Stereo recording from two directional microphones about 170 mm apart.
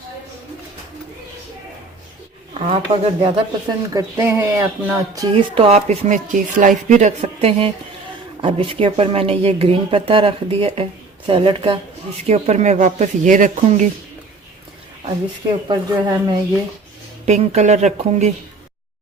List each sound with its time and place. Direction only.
2.6 s a woman's voice: 35° right (ahead or behind)
3.9 s speech: 15° right (ahead or behind)
5.3 s a woman's voice: 35° right (ahead or behind)
12.3 s speech: 40° right (ahead or behind)
15.6 s speech: 25° right (ahead or behind)
17.2 s speech: 40° right (ahead or behind)